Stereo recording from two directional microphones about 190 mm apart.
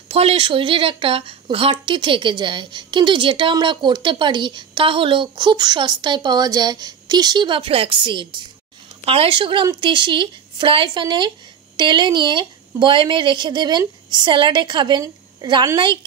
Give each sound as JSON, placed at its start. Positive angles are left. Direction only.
{"t": 0.1, "sound": "a woman's voice", "side_deg": -30}